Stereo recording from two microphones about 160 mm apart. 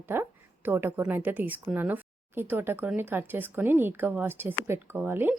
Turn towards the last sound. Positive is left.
turn(degrees=-15)  # may be behind; listen again after turning